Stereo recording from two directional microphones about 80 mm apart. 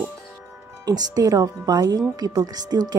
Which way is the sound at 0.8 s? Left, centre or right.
Right.